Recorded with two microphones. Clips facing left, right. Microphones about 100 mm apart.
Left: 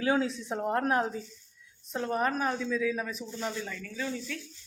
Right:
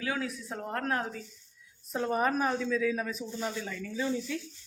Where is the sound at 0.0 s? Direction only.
25° left (ahead or behind).